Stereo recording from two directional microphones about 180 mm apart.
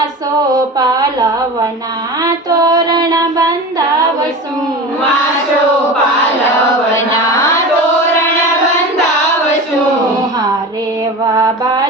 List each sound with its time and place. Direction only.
0.8 s a sound: 20° right (ahead or behind)
2.2 s child singing: 20° right (ahead or behind)
11.3 s mantra: 20° right (ahead or behind)